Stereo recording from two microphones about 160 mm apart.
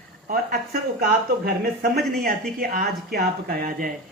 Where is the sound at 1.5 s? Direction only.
75° right (ahead or behind).